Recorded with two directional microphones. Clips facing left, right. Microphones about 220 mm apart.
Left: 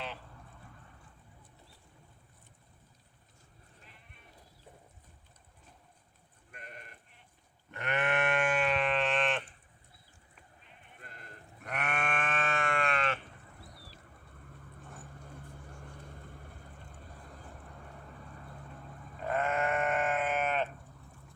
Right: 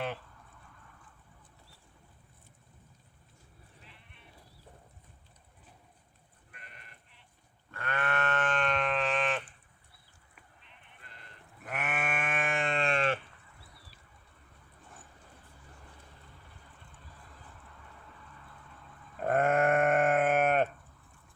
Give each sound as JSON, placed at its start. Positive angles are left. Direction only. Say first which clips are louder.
{"t": 3.8, "sound": "sheep", "louder": "right 1 dB", "side_deg": 45}
{"t": 6.5, "sound": "sheep", "louder": "left 7 dB", "side_deg": 45}
{"t": 7.7, "sound": "sheep", "louder": "left 2 dB", "side_deg": 20}
{"t": 11.0, "sound": "sheep", "louder": "left 5 dB", "side_deg": 45}
{"t": 11.6, "sound": "sheep", "louder": "even", "side_deg": 0}
{"t": 13.4, "sound": "a sound", "louder": "left 5 dB", "side_deg": 45}
{"t": 15.4, "sound": "vehicle", "louder": "left 6 dB", "side_deg": 50}
{"t": 18.3, "sound": "vehicle", "louder": "left 6 dB", "side_deg": 45}
{"t": 19.2, "sound": "sheep", "louder": "right 5 dB", "side_deg": -50}